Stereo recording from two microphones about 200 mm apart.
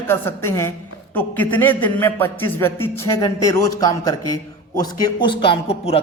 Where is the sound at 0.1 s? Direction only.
10° left (ahead or behind).